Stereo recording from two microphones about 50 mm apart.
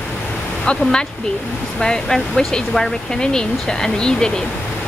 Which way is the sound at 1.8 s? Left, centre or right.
Centre.